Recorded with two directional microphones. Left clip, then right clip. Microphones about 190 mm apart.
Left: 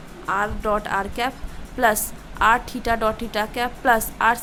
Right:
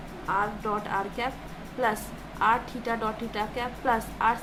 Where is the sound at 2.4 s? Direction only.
55° left (ahead or behind).